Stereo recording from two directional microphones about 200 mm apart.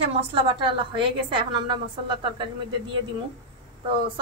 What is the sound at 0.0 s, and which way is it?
A woman's voice, 25° right (ahead or behind).